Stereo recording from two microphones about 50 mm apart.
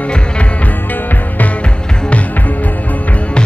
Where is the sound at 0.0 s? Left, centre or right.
Left.